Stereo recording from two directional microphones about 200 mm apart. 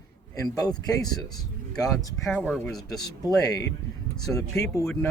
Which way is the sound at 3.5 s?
15° left (ahead or behind).